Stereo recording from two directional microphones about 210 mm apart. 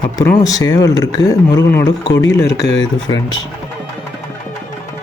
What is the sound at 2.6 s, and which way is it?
Speech, 60° left (ahead or behind).